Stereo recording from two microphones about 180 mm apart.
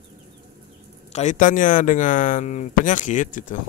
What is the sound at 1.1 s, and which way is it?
Speech, 45° left (ahead or behind).